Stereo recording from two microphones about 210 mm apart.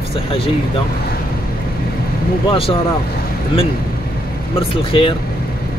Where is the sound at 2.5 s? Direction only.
25° left (ahead or behind).